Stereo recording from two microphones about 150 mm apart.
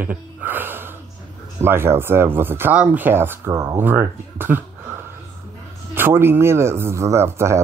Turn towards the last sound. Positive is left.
turn(degrees=-20)  # may be behind; listen again after turning